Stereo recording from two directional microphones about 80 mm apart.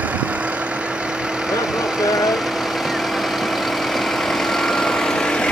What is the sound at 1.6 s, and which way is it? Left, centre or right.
Vehicle, centre.